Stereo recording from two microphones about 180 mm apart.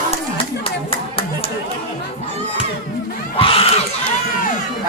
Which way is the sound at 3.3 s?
30° left (ahead or behind).